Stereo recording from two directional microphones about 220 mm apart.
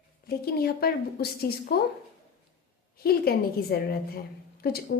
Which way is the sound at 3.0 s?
45° left (ahead or behind).